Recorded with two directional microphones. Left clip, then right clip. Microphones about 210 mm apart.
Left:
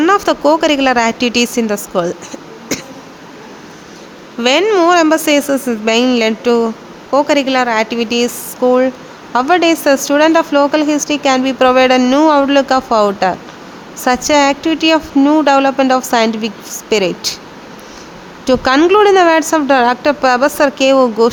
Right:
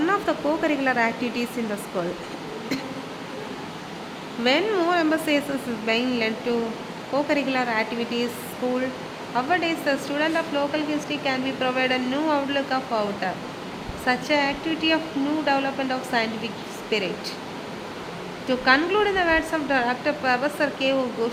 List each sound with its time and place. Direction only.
0.0 s speech: 50° left (ahead or behind)
4.4 s speech: 45° left (ahead or behind)
18.4 s speech: 55° left (ahead or behind)